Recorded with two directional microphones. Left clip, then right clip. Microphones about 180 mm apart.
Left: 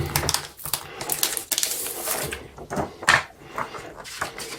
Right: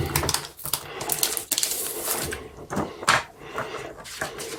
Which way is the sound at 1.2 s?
Centre (ahead or behind).